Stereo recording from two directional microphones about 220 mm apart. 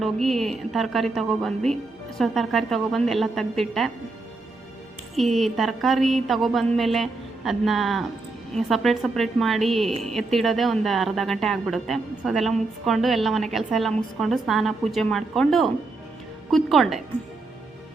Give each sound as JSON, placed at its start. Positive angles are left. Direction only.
{"t": 0.0, "sound": "a woman's voice", "side_deg": 0}
{"t": 5.1, "sound": "a woman's voice", "side_deg": 0}